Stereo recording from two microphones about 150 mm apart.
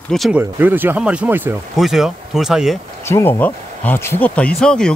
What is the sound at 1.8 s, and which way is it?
Speech, centre (ahead or behind).